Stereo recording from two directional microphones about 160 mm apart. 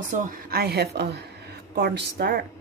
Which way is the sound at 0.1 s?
55° right (ahead or behind).